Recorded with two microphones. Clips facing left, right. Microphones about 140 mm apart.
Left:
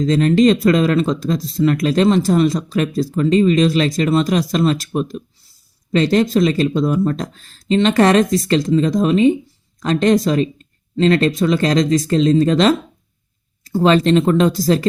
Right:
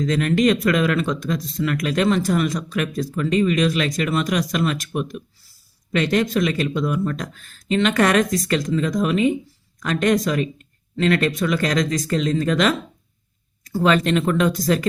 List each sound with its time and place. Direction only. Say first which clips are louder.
0.0 s speech: left 5 dB; 30° left (ahead or behind)